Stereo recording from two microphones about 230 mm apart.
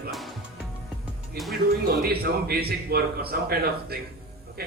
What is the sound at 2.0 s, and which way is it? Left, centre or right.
A man's voice, right.